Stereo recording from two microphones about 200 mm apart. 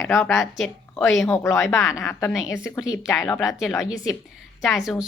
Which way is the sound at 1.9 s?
15° left (ahead or behind).